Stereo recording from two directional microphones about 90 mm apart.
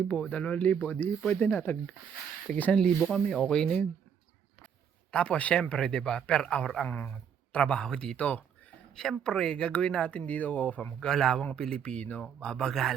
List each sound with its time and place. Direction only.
0.1 s speech: 15° left (ahead or behind)
3.0 s speech: centre (ahead or behind)
5.1 s speech: 10° left (ahead or behind)
6.8 s speech: 15° left (ahead or behind)